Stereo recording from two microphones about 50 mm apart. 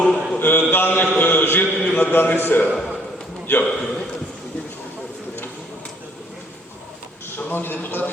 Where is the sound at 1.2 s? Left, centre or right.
Left.